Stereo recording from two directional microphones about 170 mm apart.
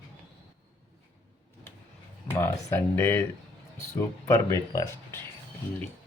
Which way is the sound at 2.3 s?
15° left (ahead or behind).